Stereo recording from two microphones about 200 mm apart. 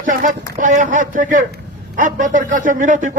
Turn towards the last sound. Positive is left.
turn(degrees=-40)  # may be behind; listen again after turning